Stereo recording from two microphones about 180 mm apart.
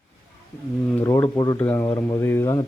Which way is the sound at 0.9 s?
10° left (ahead or behind).